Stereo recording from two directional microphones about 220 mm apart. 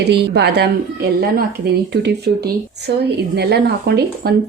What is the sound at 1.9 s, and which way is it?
Speech, 50° right (ahead or behind).